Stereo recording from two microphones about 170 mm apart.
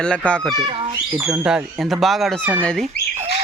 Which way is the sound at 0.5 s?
30° right (ahead or behind).